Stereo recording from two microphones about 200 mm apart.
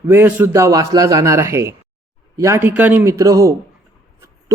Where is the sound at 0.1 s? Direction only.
10° right (ahead or behind).